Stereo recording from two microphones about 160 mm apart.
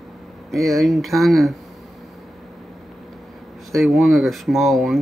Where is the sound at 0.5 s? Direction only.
Centre (ahead or behind).